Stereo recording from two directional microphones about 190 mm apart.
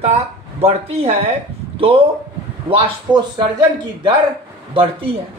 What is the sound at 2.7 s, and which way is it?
A man's voice, 25° right (ahead or behind).